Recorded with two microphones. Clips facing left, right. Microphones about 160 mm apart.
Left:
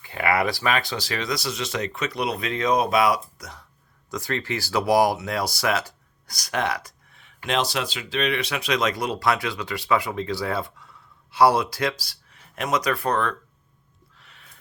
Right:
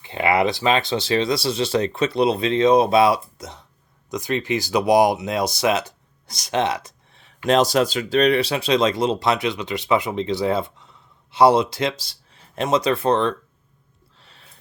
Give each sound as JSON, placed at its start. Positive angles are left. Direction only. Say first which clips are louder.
{"t": 0.0, "sound": "speech", "louder": "right 4 dB", "side_deg": -20}
{"t": 7.4, "sound": "speech", "louder": "right 8 dB", "side_deg": -40}
{"t": 14.2, "sound": "a sound", "louder": "right 2 dB", "side_deg": -30}